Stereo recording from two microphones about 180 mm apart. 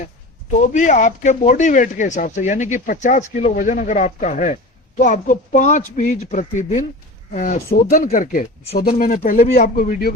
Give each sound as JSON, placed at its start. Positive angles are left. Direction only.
{"t": 0.7, "sound": "speech", "side_deg": 45}